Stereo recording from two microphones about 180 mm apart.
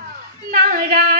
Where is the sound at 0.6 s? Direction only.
55° right (ahead or behind).